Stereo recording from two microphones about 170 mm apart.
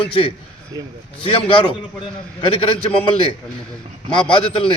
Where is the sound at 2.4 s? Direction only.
30° left (ahead or behind).